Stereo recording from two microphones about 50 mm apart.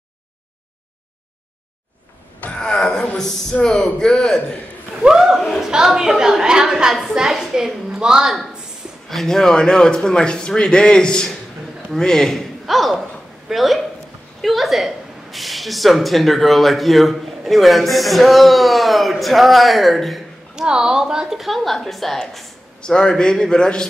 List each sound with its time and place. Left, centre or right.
2.6 s a sound: centre
3.2 s speech: centre
5.0 s a woman's voice: centre
9.1 s a man's voice: centre
20.5 s speech: centre
22.8 s speech: centre